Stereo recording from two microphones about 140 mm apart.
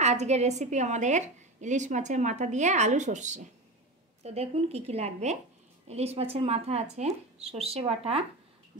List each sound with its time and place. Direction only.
0.0 s a woman's voice: 50° right (ahead or behind)
4.2 s speech: 50° right (ahead or behind)